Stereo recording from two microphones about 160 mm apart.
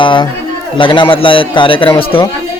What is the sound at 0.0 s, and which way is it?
A man's voice, 30° left (ahead or behind).